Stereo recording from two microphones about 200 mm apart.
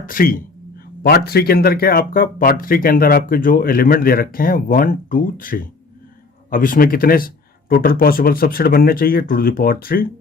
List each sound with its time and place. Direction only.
0.0 s speech: 45° left (ahead or behind)